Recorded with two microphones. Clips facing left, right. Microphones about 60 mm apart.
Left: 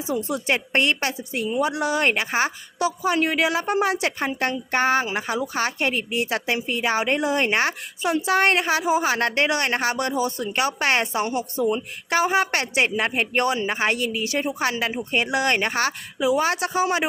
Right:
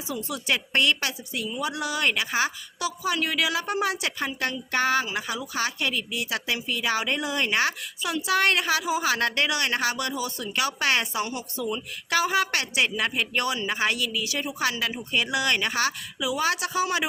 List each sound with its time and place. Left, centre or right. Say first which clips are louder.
0.1 s a woman's voice: left 4 dB; left